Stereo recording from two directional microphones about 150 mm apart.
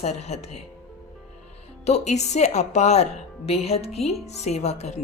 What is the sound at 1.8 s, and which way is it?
Speech, 50° left (ahead or behind).